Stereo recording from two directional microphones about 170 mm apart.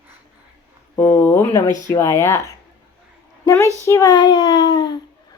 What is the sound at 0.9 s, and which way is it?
Speech, 15° left (ahead or behind).